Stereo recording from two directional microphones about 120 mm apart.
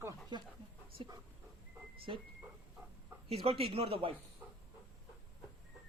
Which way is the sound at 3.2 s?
55° right (ahead or behind).